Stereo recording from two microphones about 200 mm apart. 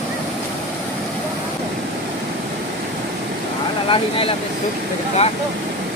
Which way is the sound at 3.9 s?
25° left (ahead or behind).